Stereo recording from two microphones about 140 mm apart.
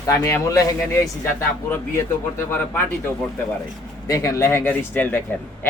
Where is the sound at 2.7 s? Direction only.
15° left (ahead or behind).